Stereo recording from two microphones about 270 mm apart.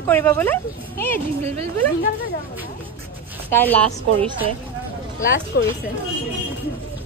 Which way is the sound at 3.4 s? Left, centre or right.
Centre.